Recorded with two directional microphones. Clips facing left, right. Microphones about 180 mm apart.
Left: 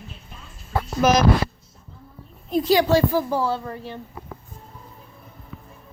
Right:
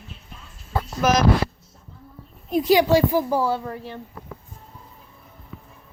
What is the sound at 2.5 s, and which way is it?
A woman's voice, 15° right (ahead or behind).